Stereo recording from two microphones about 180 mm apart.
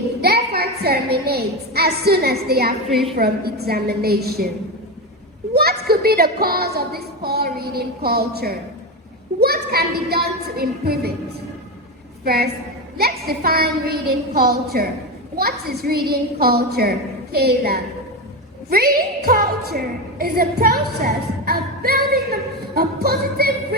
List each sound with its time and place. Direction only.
0.2 s a sound: 60° right (ahead or behind)
3.2 s a woman's voice: 60° right (ahead or behind)
5.5 s child singing: 60° right (ahead or behind)
9.4 s a woman's voice: 60° right (ahead or behind)
12.2 s a woman's voice: 60° right (ahead or behind)